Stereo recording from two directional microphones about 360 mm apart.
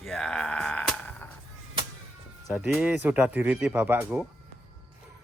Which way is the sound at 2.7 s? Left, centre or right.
Centre.